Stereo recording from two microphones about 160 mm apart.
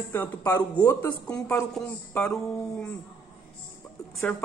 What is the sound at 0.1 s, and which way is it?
Speech, 15° left (ahead or behind).